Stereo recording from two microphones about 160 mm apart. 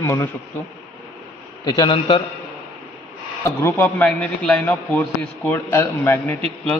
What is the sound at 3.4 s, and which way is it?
Speech, 20° left (ahead or behind).